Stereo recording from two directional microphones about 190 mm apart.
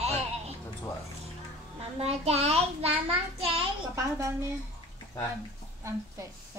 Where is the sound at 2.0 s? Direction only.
35° right (ahead or behind).